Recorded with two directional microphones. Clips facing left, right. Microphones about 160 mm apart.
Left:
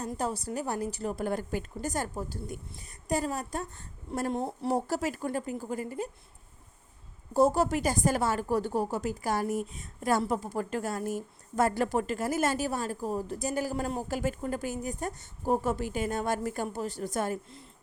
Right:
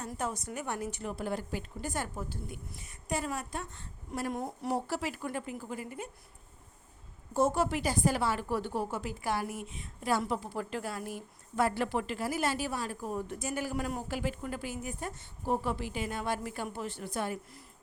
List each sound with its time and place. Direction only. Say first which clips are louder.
0.2 s a woman's voice: left 3 dB; 35° left (ahead or behind)
1.1 s a woman's voice: left 4 dB; 50° left (ahead or behind)
4.3 s speech: left 5 dB; 25° left (ahead or behind)
4.7 s a woman's voice: left 4 dB; 40° left (ahead or behind)
7.3 s a woman's voice: left 4 dB; 35° left (ahead or behind)